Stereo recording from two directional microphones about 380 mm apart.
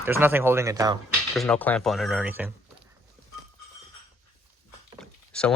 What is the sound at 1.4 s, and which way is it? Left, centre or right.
Speech, centre.